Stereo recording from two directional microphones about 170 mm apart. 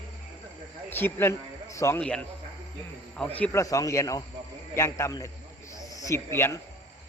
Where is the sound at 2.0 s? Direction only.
5° left (ahead or behind).